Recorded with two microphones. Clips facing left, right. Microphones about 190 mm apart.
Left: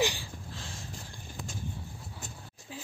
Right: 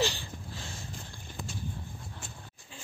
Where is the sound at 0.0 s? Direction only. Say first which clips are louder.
Left 1 dB; 10° left (ahead or behind).